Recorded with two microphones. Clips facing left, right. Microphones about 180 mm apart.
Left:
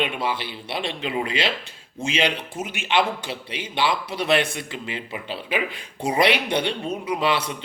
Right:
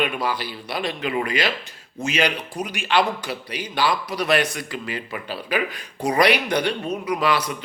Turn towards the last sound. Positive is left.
turn(degrees=25)  # may be behind; listen again after turning